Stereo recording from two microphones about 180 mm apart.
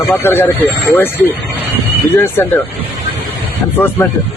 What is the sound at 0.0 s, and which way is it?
Speech, 10° left (ahead or behind).